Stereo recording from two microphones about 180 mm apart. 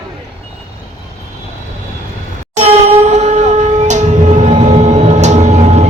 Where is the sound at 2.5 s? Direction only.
40° right (ahead or behind).